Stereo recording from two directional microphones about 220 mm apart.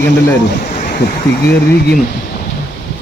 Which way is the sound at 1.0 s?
50° left (ahead or behind).